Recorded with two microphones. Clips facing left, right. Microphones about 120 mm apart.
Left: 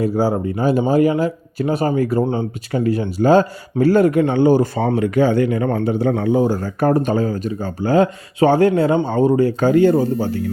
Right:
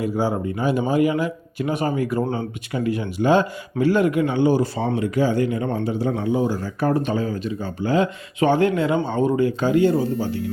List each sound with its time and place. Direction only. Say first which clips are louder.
0.0 s speech: left 4 dB; 35° left (ahead or behind)
2.2 s speech: left 4 dB; 20° left (ahead or behind)
2.7 s a man's voice: left 5 dB; 40° left (ahead or behind)